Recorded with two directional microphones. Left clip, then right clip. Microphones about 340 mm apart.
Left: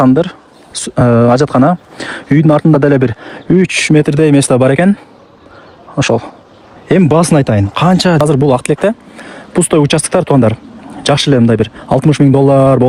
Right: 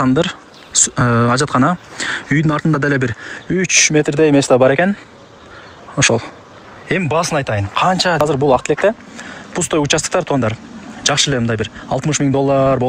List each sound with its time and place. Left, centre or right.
0.0 s speech: centre
6.0 s speech: centre